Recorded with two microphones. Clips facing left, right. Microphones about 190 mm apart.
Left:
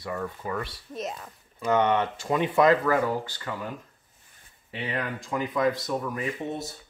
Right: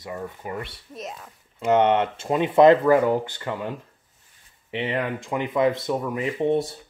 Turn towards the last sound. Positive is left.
turn(degrees=-30)  # may be behind; listen again after turning